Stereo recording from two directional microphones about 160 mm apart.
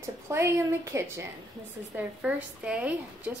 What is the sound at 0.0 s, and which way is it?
A woman's voice, 15° right (ahead or behind).